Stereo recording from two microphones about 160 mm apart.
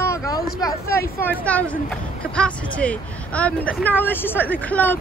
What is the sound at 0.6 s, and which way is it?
Speech, 20° left (ahead or behind).